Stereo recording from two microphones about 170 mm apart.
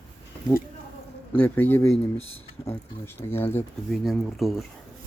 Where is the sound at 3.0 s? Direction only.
15° left (ahead or behind).